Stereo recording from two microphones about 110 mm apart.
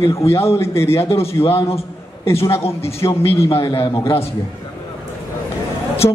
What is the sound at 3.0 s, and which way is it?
Speech, 35° left (ahead or behind).